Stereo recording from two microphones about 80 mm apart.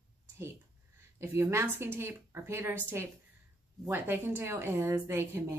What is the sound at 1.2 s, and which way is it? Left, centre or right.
A woman's voice, right.